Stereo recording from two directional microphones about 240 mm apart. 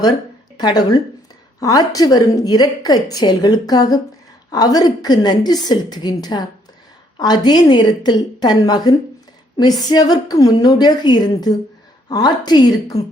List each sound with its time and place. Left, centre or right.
0.5 s a woman's voice: centre